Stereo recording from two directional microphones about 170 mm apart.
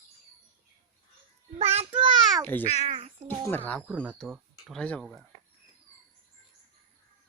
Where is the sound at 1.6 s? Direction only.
35° right (ahead or behind).